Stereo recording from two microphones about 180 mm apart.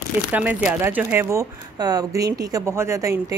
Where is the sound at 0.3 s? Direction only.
10° right (ahead or behind).